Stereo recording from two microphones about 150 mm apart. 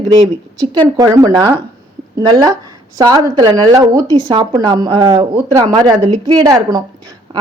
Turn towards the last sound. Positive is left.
turn(degrees=-35)  # may be behind; listen again after turning